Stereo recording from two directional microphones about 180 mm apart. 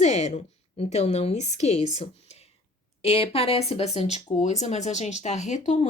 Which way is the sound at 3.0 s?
35° left (ahead or behind).